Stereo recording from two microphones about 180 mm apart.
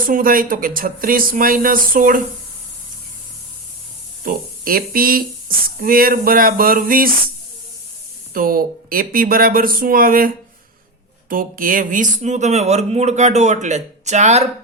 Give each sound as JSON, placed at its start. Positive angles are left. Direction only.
{"t": 0.0, "sound": "speech", "side_deg": -50}
{"t": 4.2, "sound": "speech", "side_deg": -50}
{"t": 8.3, "sound": "speech", "side_deg": -50}